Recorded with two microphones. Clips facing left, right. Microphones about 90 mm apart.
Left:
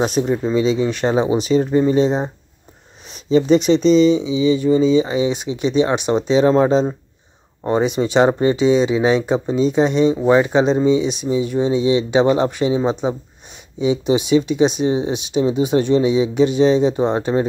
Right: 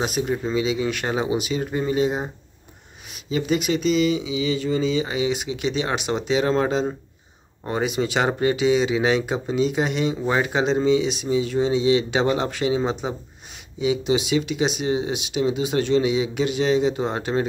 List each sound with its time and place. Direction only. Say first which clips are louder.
0.0 s speech: left 6 dB; 30° left (ahead or behind)